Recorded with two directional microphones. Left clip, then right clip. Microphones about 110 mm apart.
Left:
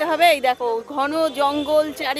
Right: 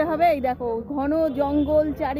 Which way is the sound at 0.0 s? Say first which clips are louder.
Left 4 dB; 15° left (ahead or behind).